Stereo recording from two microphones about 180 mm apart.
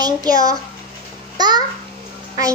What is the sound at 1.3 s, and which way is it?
Speech, 25° right (ahead or behind).